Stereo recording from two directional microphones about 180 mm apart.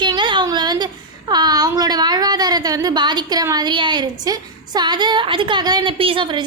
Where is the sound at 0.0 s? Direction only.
25° right (ahead or behind).